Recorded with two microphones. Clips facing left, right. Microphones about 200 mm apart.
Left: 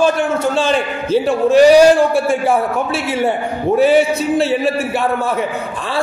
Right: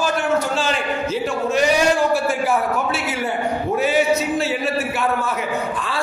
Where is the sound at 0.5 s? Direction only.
30° left (ahead or behind).